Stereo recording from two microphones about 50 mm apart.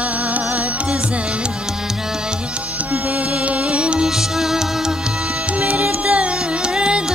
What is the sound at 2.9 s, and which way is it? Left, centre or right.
Music, right.